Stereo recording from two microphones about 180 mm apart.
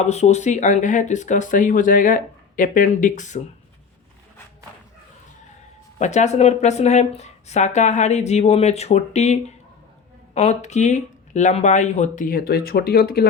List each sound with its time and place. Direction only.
0.0 s speech: 40° left (ahead or behind)
6.0 s speech: 40° left (ahead or behind); by 13.2 s 60° left (ahead or behind)